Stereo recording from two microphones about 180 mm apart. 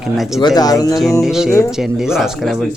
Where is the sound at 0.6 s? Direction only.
20° left (ahead or behind).